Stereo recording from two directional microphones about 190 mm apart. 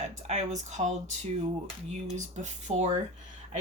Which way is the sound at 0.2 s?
40° right (ahead or behind).